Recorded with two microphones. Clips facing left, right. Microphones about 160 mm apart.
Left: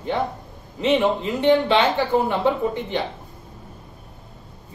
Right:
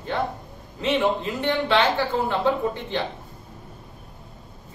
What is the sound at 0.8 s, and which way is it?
Speech, 20° left (ahead or behind).